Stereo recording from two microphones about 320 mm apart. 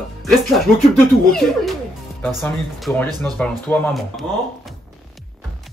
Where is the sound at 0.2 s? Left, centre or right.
Centre.